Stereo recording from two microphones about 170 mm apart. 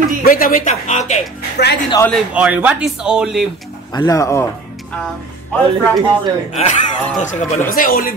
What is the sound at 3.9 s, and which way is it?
Speech, 20° left (ahead or behind).